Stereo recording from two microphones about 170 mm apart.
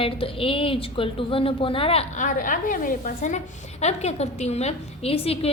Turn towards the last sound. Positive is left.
turn(degrees=35)  # may be behind; listen again after turning